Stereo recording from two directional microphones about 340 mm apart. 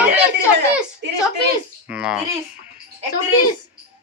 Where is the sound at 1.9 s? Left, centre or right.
Centre.